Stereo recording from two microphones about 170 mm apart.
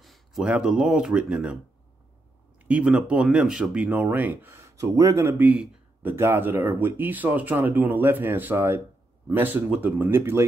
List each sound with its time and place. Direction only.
0.0 s speech: centre (ahead or behind)
2.6 s speech: 5° right (ahead or behind)